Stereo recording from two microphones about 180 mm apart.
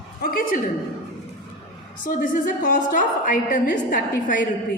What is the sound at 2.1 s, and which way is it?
A woman's voice, 45° left (ahead or behind).